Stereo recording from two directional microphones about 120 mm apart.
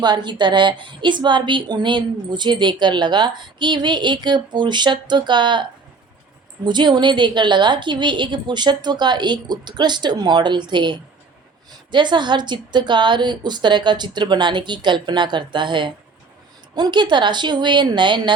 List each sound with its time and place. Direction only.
0.0 s a woman's voice: 40° right (ahead or behind)
6.7 s a woman's voice: 40° right (ahead or behind)